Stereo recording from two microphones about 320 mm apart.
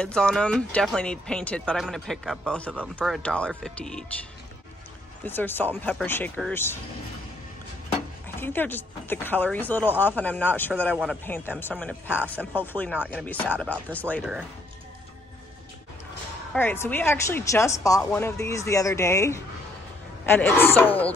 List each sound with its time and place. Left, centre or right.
0.0 s speech: centre
5.2 s speech: centre
8.4 s speech: centre
16.5 s speech: centre